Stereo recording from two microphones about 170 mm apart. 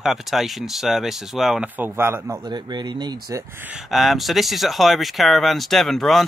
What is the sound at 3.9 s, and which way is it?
Speech, centre (ahead or behind).